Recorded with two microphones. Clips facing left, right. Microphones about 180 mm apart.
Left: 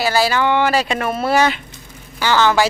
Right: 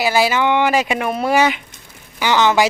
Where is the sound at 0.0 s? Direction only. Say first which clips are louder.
Right 1 dB; 15° right (ahead or behind).